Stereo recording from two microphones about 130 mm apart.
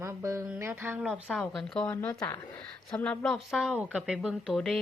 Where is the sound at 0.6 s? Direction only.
20° right (ahead or behind).